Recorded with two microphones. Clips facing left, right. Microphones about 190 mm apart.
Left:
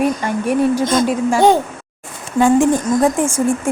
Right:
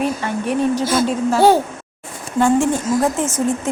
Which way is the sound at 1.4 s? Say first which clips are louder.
Even; 5° right (ahead or behind).